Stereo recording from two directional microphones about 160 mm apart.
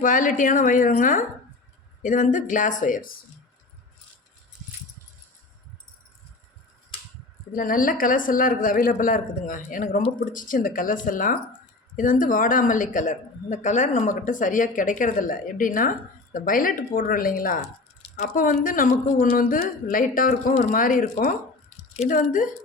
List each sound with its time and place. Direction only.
0.0 s speech: 55° left (ahead or behind)
7.5 s speech: 60° left (ahead or behind)